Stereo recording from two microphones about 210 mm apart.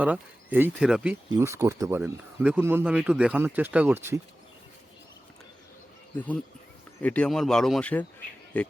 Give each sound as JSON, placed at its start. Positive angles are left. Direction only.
{"t": 0.0, "sound": "speech", "side_deg": -5}
{"t": 1.3, "sound": "speech", "side_deg": -15}
{"t": 6.1, "sound": "speech", "side_deg": 5}